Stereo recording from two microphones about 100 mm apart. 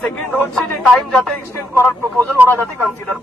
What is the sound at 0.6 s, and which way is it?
Speech, 5° left (ahead or behind).